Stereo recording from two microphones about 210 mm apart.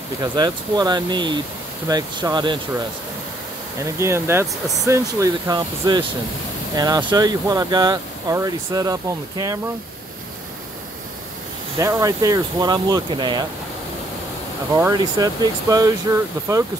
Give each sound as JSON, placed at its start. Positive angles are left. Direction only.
{"t": 0.2, "sound": "speech", "side_deg": -20}
{"t": 3.8, "sound": "speech", "side_deg": -15}
{"t": 11.8, "sound": "speech", "side_deg": -15}
{"t": 14.8, "sound": "speech", "side_deg": -15}